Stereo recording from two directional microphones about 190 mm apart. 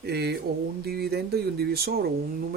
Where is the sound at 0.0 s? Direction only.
60° right (ahead or behind).